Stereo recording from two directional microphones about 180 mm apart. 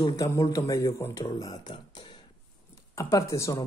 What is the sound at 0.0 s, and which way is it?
Speech, 20° left (ahead or behind).